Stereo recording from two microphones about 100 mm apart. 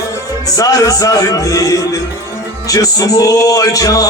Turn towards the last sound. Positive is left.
turn(degrees=35)  # may be behind; listen again after turning